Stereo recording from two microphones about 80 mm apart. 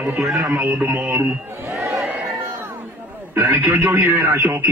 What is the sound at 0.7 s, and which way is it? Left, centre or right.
Speech, right.